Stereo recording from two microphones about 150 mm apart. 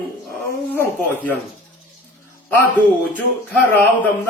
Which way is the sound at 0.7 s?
10° left (ahead or behind).